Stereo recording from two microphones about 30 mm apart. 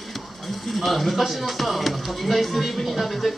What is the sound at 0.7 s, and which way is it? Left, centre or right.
Speech, centre.